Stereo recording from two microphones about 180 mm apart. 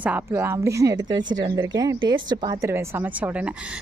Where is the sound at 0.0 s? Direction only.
10° right (ahead or behind).